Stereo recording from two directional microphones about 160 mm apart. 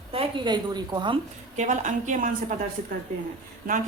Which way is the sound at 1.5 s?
50° right (ahead or behind).